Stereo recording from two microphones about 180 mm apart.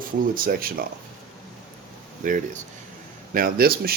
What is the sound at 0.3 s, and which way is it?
Speech, 55° right (ahead or behind).